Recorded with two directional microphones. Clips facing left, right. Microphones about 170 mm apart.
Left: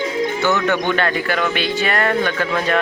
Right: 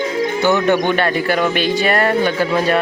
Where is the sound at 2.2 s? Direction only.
10° right (ahead or behind).